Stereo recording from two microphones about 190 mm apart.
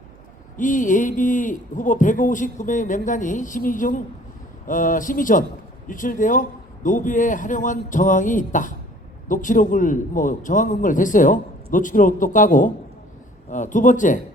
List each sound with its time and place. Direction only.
0.5 s a man's voice: 40° left (ahead or behind)